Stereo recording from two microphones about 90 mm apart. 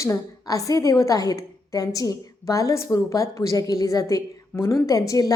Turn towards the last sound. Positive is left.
turn(degrees=40)  # may be behind; listen again after turning